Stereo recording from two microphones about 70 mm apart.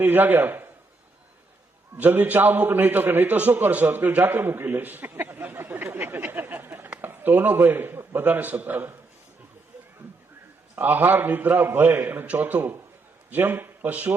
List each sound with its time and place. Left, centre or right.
0.0 s a man's voice: right
2.0 s a man's voice: right
10.8 s a man's voice: right